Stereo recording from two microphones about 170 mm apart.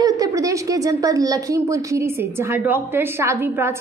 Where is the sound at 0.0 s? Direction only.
20° right (ahead or behind).